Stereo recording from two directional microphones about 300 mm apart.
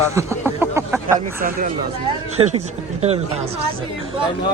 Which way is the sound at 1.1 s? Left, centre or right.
Right.